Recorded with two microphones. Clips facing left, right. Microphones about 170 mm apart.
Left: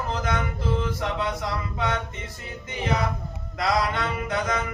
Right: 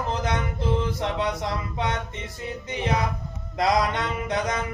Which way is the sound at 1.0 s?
25° right (ahead or behind).